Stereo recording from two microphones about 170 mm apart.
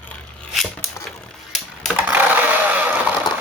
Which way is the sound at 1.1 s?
Centre (ahead or behind).